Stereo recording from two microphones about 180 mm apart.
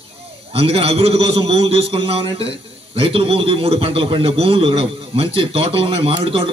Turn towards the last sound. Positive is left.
turn(degrees=-30)  # may be behind; listen again after turning